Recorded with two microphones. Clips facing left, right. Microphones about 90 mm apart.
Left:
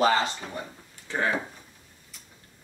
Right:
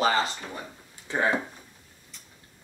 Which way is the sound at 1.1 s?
15° right (ahead or behind).